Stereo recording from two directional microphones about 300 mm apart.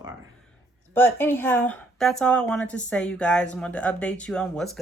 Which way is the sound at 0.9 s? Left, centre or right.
Centre.